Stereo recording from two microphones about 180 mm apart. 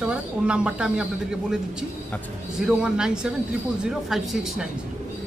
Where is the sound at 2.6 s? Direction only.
5° right (ahead or behind).